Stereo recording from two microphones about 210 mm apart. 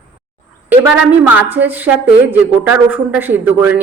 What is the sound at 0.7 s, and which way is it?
A woman's voice, 5° right (ahead or behind).